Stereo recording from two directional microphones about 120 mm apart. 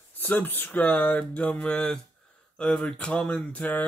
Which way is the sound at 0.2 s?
15° left (ahead or behind).